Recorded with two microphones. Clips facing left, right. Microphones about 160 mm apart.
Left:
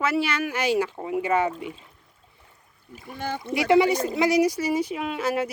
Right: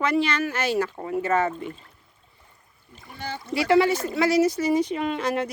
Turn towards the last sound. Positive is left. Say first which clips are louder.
# right 1 dB
turn(degrees=5)  # may be behind; listen again after turning